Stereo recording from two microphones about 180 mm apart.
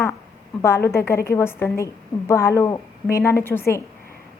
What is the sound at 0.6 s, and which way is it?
A woman's voice, 15° left (ahead or behind).